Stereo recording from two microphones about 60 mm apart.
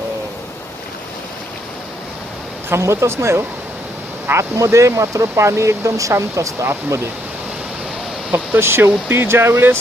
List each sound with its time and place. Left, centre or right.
2.6 s speech: right
8.5 s speech: right